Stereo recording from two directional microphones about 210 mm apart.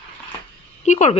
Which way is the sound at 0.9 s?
35° left (ahead or behind).